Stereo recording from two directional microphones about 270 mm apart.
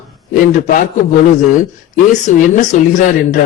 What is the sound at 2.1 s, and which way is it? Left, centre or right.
A man's voice, left.